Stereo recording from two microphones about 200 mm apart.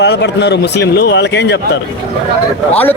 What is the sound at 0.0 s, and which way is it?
A man's voice, 60° left (ahead or behind).